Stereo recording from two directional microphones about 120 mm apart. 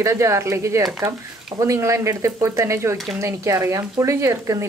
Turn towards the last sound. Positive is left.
turn(degrees=-25)  # may be behind; listen again after turning